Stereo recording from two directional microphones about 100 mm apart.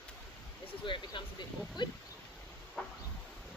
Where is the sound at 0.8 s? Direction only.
55° left (ahead or behind).